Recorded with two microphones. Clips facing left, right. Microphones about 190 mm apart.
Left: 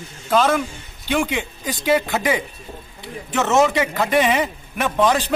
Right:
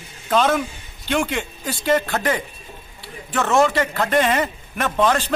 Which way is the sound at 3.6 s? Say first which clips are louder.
Left 1 dB; 10° left (ahead or behind).